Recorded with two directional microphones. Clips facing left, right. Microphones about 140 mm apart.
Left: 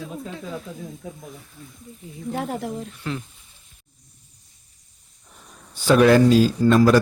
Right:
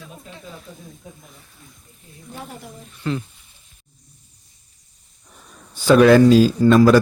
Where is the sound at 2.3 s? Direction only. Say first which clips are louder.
Left 9 dB; 90° left.